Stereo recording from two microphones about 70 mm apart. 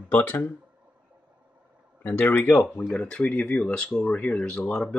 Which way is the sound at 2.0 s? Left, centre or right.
Left.